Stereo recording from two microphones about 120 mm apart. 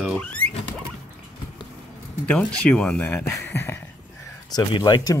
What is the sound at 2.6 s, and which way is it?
Speech, 10° left (ahead or behind).